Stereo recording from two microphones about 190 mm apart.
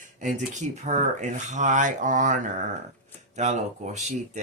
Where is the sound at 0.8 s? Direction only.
40° right (ahead or behind).